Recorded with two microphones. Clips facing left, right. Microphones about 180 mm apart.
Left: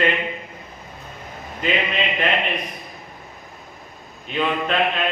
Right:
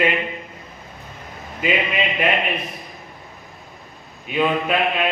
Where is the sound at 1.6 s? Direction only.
10° right (ahead or behind).